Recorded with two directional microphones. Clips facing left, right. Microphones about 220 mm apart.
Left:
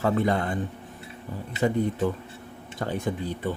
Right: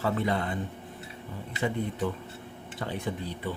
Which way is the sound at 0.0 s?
45° left (ahead or behind).